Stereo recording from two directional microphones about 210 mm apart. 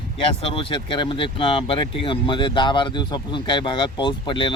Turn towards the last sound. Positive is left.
turn(degrees=25)  # may be behind; listen again after turning